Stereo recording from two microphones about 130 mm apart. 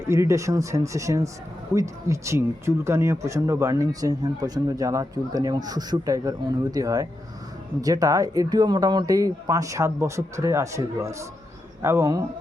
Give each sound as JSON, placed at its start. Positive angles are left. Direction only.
{"t": 0.1, "sound": "speech", "side_deg": -20}